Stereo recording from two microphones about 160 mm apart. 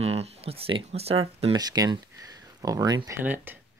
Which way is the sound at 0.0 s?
40° right (ahead or behind).